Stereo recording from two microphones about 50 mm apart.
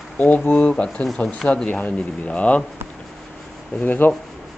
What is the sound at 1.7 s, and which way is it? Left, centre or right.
Speech, left.